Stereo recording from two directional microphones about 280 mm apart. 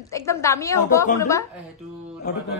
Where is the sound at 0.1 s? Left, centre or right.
Centre.